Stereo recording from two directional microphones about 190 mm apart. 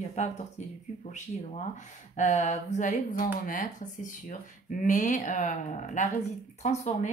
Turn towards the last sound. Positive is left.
turn(degrees=40)  # may be behind; listen again after turning